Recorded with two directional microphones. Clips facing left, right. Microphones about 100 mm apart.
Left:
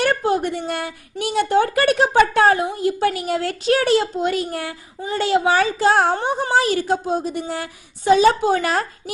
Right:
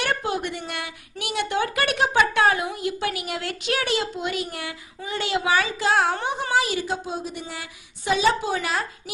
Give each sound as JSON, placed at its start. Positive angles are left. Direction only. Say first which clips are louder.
{"t": 0.0, "sound": "a woman's voice", "louder": "left 7 dB", "side_deg": 40}